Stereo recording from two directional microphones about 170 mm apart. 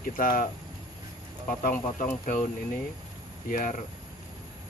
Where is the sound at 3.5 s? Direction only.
50° left (ahead or behind).